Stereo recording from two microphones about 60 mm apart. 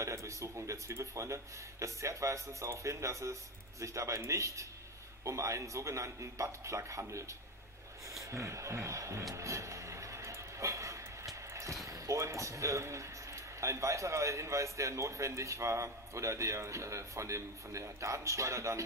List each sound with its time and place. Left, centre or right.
0.0 s speech: right
9.3 s a sound: right
11.8 s speech: right